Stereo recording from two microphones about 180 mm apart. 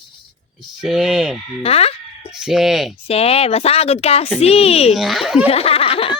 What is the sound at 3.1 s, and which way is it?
Speech, 35° left (ahead or behind).